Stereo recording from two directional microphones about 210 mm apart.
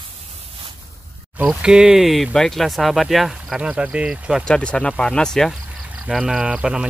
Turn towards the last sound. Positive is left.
turn(degrees=-5)  # may be behind; listen again after turning